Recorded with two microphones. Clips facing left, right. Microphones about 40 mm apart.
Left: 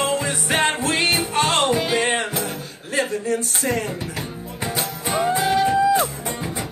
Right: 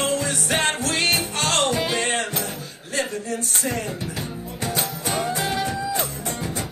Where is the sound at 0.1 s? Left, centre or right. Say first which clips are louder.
Left 2 dB; left.